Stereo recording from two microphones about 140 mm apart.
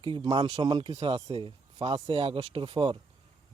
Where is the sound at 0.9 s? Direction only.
45° right (ahead or behind).